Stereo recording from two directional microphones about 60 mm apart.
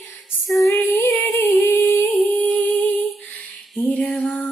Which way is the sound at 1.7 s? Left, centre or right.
Left.